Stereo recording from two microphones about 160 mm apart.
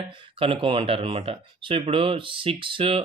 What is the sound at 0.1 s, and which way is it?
Speech, 30° right (ahead or behind).